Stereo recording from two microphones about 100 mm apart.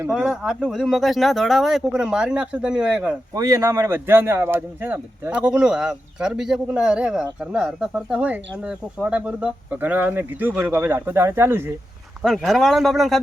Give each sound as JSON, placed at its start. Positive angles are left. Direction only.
{"t": 0.1, "sound": "speech", "side_deg": -5}
{"t": 3.3, "sound": "speech", "side_deg": -30}
{"t": 12.2, "sound": "speech", "side_deg": 0}